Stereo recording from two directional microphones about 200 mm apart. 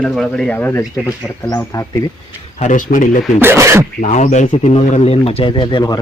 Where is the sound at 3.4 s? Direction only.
10° right (ahead or behind).